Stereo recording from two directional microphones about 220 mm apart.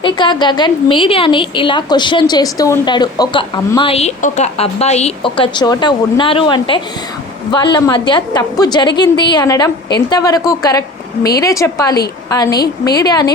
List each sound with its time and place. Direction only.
0.0 s a woman's voice: 20° left (ahead or behind)